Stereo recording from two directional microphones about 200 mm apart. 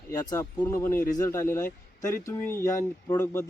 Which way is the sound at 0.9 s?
45° left (ahead or behind).